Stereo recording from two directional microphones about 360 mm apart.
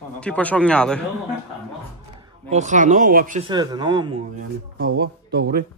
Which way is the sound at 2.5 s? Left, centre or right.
Centre.